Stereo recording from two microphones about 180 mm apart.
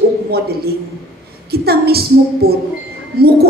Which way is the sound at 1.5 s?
60° right (ahead or behind).